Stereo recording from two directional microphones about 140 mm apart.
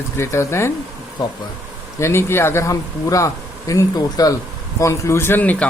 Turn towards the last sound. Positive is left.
turn(degrees=10)  # may be behind; listen again after turning